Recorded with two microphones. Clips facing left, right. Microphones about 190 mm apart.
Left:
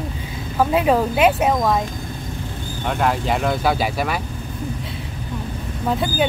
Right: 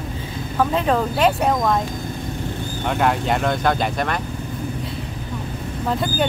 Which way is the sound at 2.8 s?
Centre (ahead or behind).